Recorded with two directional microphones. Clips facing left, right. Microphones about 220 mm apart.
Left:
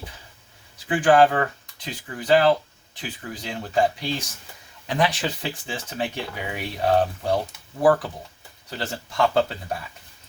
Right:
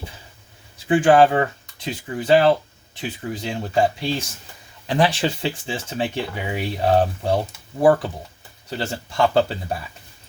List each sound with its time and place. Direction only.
0.9 s speech: 25° right (ahead or behind)
8.8 s speech: 30° right (ahead or behind)